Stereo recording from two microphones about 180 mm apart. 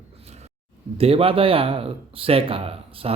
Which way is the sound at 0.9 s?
30° right (ahead or behind).